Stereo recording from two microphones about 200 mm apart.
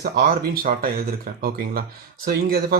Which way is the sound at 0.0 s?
50° right (ahead or behind).